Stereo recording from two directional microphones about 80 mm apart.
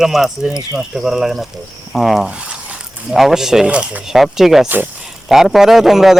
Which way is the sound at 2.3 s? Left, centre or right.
Centre.